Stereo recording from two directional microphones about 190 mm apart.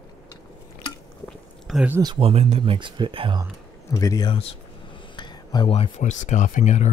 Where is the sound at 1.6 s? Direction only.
Centre (ahead or behind).